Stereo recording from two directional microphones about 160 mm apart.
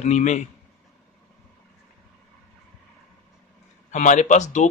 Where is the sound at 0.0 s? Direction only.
45° left (ahead or behind).